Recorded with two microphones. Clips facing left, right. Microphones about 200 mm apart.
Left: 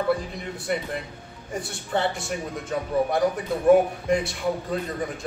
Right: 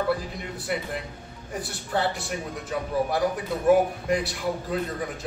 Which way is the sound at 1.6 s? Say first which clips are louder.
Left 1 dB; centre (ahead or behind).